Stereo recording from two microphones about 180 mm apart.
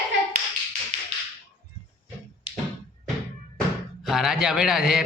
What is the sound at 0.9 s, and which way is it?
Tap, 40° right (ahead or behind).